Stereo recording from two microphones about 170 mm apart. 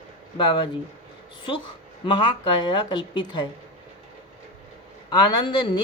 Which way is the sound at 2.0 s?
25° left (ahead or behind).